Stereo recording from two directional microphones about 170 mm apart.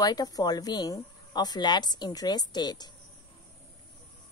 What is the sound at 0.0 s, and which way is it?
Speech, 20° left (ahead or behind).